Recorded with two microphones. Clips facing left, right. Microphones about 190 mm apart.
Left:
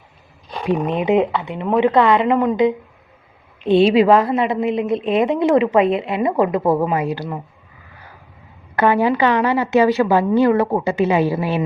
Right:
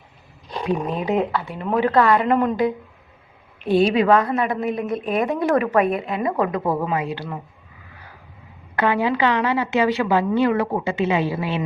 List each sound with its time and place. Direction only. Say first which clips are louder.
0.6 s a woman's voice: left 4 dB; 25° left (ahead or behind)
8.9 s a woman's voice: left 4 dB; 45° left (ahead or behind)